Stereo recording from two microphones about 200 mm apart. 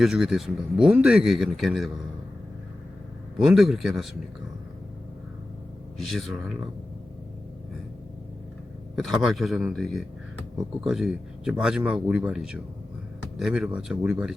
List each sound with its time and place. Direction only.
0.0 s speech: centre (ahead or behind)
3.3 s speech: centre (ahead or behind)
6.1 s speech: centre (ahead or behind)
9.0 s speech: centre (ahead or behind)